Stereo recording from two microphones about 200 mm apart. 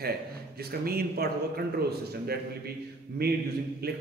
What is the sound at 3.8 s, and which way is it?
Speech, 50° right (ahead or behind).